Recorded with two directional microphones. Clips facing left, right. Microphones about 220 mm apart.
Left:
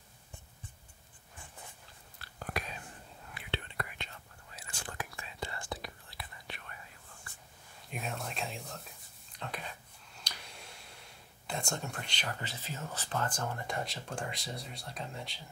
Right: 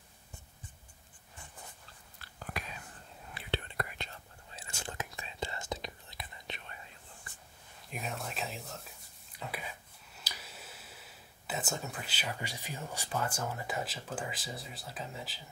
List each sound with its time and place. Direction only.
3.3 s whispering: 40° right (ahead or behind); by 6.8 s 20° right (ahead or behind)
7.9 s speech: centre (ahead or behind)
9.4 s whispering: 5° right (ahead or behind)
10.1 s speech: 5° right (ahead or behind)